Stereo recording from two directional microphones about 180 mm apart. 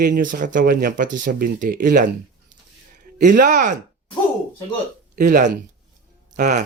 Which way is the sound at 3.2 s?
45° right (ahead or behind).